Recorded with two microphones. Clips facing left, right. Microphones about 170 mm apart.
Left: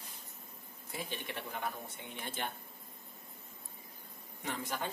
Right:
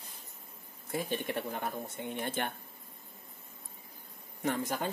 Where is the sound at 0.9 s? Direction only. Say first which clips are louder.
Right 8 dB; 45° right (ahead or behind).